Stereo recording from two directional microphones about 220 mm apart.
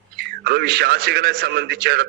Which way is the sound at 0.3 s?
50° right (ahead or behind).